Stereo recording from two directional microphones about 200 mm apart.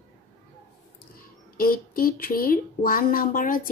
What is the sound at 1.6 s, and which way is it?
Speech, 45° left (ahead or behind).